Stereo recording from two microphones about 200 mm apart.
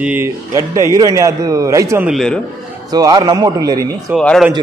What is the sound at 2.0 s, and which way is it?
Speech, centre (ahead or behind).